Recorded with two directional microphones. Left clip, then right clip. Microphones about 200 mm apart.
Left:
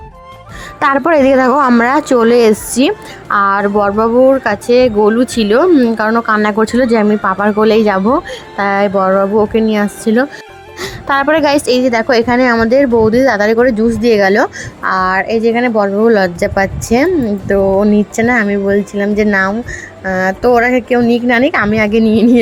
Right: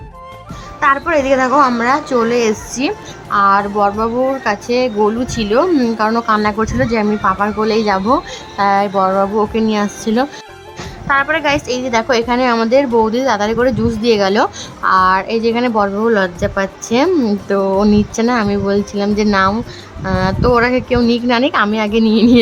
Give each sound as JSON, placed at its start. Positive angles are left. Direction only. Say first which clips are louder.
{"t": 0.8, "sound": "a woman's voice", "louder": "left 3 dB", "side_deg": 40}
{"t": 5.7, "sound": "a woman's voice", "louder": "left 3 dB", "side_deg": 10}
{"t": 10.8, "sound": "a woman's voice", "louder": "left 1 dB", "side_deg": 40}
{"t": 17.0, "sound": "speech", "louder": "right 1 dB", "side_deg": 0}
{"t": 20.1, "sound": "speech", "louder": "left 3 dB", "side_deg": 15}